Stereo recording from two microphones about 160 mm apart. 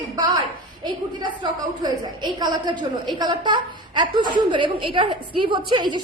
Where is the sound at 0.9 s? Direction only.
30° right (ahead or behind).